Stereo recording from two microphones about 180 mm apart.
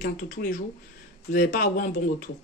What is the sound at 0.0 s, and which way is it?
Speech, 55° left (ahead or behind).